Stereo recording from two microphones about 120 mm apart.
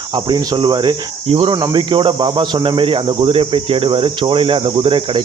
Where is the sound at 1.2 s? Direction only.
50° right (ahead or behind).